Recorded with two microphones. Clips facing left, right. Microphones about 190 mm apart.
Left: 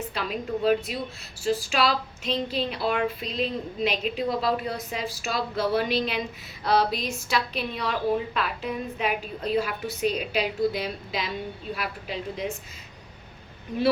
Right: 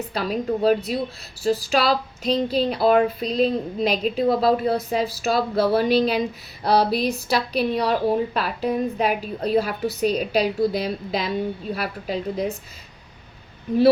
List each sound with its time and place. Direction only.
0.0 s speech: 40° right (ahead or behind)